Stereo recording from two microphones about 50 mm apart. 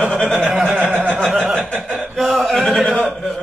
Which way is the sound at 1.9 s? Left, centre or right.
Right.